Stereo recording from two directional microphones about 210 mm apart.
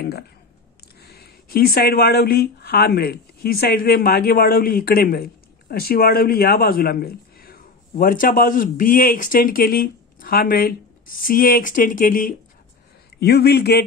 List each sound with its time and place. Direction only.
1.0 s a man's voice: 45° left (ahead or behind)